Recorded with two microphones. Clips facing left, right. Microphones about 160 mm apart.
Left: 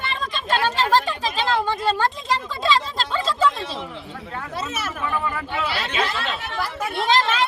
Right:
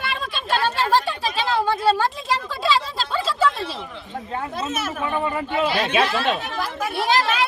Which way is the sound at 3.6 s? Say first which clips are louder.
Even; 15° left (ahead or behind).